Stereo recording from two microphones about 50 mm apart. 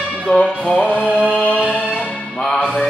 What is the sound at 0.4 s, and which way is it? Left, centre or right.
Music, centre.